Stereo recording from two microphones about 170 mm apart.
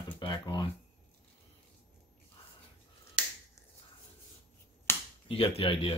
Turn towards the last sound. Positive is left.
turn(degrees=35)  # may be behind; listen again after turning